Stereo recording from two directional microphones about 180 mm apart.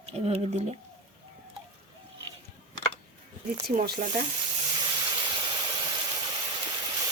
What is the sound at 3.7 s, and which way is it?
Speech, 45° right (ahead or behind).